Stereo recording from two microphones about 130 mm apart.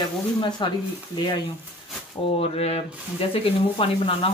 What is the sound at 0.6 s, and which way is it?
Speech, 35° left (ahead or behind).